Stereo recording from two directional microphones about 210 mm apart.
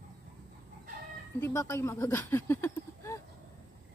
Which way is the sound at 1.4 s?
15° left (ahead or behind).